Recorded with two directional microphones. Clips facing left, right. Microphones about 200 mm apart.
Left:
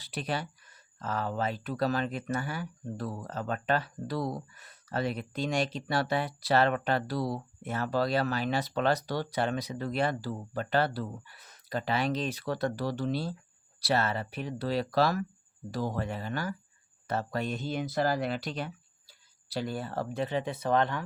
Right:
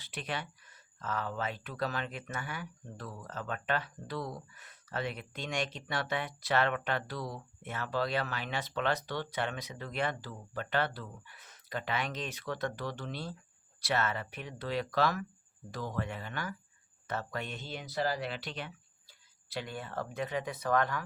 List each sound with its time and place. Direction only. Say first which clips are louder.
0.0 s speech: left 5 dB; 35° left (ahead or behind)